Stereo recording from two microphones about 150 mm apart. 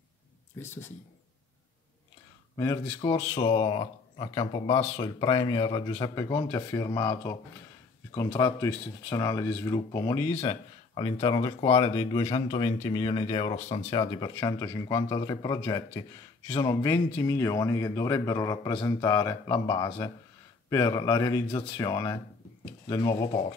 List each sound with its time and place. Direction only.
0.6 s speech: 15° left (ahead or behind)
2.5 s speech: 20° left (ahead or behind)
3.0 s a man's voice: 35° left (ahead or behind)
10.3 s a man's voice: 40° left (ahead or behind)
12.4 s speech: 35° left (ahead or behind)
14.1 s a man's voice: 30° left (ahead or behind)